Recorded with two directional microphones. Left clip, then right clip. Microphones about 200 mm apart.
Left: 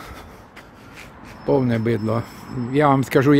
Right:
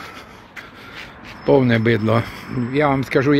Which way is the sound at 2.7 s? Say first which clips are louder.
Left 1 dB; 10° left (ahead or behind).